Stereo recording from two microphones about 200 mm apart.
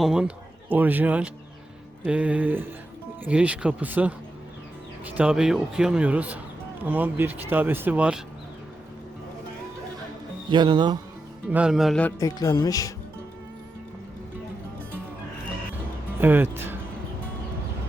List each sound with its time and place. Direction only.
0.0 s speech: 5° right (ahead or behind)
10.5 s speech: 25° right (ahead or behind)
11.4 s speech: 5° right (ahead or behind)
12.2 s speech: 20° left (ahead or behind)
16.2 s speech: 10° right (ahead or behind)